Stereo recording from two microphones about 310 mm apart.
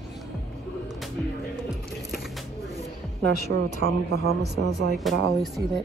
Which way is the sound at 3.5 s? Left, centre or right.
Right.